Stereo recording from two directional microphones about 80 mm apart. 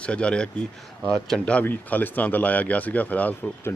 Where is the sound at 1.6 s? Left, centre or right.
Left.